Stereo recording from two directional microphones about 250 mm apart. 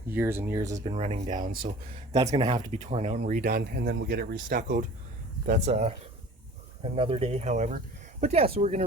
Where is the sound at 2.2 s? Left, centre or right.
Centre.